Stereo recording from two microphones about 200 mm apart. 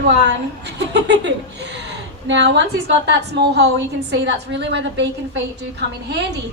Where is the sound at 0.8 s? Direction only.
60° right (ahead or behind).